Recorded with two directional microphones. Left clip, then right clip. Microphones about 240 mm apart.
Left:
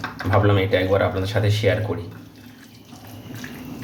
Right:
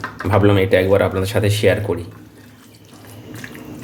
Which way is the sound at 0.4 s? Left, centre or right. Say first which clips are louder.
Right 8 dB; right.